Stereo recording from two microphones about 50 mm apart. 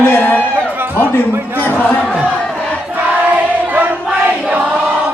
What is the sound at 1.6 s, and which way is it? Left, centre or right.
Chant, left.